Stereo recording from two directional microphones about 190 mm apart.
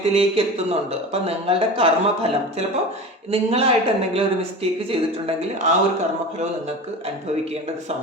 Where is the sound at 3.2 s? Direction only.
30° right (ahead or behind).